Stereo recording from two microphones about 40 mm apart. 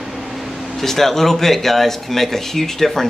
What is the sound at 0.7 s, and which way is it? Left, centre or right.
Speech, centre.